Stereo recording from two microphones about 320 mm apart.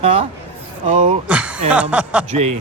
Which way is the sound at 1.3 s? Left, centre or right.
Centre.